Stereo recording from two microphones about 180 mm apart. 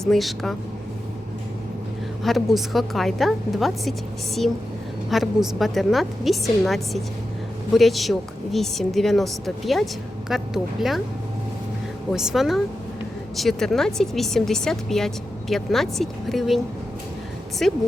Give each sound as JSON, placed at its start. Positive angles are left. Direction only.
{"t": 0.0, "sound": "a woman's voice", "side_deg": 0}
{"t": 2.2, "sound": "a woman's voice", "side_deg": 0}
{"t": 5.1, "sound": "a woman's voice", "side_deg": 0}
{"t": 12.1, "sound": "a woman's voice", "side_deg": 0}
{"t": 17.6, "sound": "a woman's voice", "side_deg": 0}